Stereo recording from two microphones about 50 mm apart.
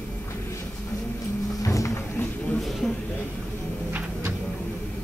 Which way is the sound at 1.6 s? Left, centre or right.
Left.